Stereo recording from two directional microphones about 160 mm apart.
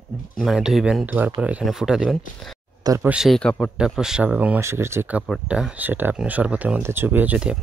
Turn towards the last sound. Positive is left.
turn(degrees=-10)  # may be behind; listen again after turning